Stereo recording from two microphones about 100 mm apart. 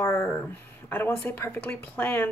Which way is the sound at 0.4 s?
20° left (ahead or behind).